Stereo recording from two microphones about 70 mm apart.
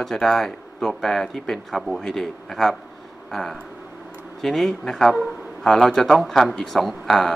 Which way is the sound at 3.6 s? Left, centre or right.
Right.